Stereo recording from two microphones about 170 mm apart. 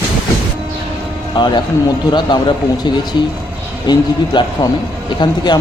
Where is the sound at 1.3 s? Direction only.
25° left (ahead or behind).